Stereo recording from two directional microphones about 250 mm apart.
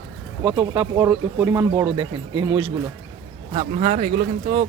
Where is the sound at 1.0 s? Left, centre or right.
Centre.